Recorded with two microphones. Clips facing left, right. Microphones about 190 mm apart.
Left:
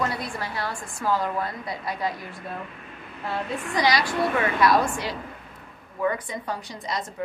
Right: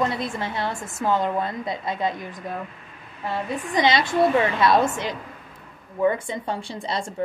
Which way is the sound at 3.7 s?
25° right (ahead or behind).